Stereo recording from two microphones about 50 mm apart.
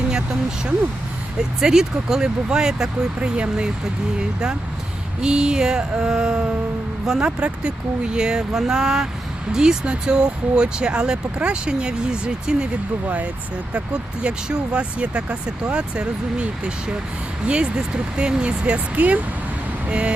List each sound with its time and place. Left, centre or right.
0.1 s speech: centre
3.2 s speech: right
5.2 s speech: centre
13.7 s speech: centre